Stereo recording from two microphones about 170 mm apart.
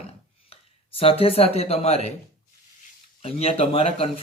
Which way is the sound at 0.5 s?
35° left (ahead or behind).